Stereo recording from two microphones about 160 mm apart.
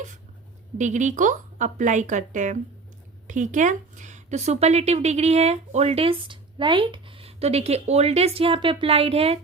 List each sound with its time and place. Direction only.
0.8 s speech: 50° right (ahead or behind)